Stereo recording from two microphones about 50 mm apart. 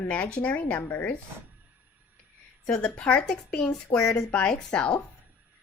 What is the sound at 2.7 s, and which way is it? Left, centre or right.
A woman's voice, centre.